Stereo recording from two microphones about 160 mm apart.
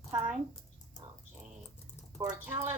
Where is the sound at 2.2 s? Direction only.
10° right (ahead or behind).